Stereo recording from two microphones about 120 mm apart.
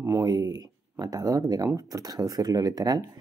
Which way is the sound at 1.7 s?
30° right (ahead or behind).